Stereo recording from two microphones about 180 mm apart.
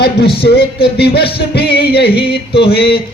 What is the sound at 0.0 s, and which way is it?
Music, 65° left (ahead or behind).